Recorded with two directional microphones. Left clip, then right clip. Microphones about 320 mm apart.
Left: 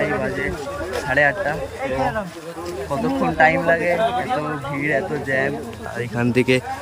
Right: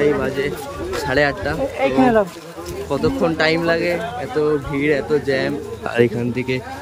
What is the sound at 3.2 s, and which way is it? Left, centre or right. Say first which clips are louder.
Speech: left 3 dB; centre.